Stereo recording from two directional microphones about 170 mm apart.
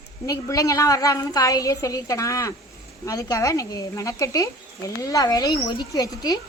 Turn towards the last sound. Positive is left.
turn(degrees=20)  # may be behind; listen again after turning